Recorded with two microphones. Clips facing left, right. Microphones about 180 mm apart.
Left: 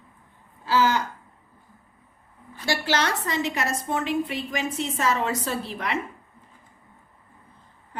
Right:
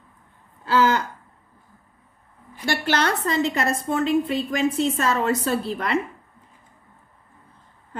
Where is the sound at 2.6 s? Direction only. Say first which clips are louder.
Right 2 dB; 55° right (ahead or behind).